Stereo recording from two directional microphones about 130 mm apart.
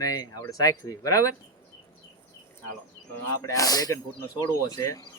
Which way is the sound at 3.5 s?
25° left (ahead or behind).